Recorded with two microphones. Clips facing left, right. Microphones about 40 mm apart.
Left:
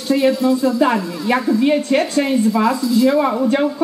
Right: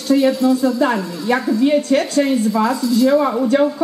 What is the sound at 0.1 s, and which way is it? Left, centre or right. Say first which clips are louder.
A woman's voice: right 1 dB; left.